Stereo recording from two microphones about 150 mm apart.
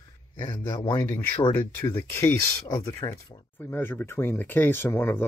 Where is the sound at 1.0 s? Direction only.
20° left (ahead or behind).